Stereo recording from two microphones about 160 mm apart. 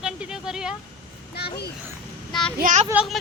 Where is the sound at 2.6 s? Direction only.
50° right (ahead or behind).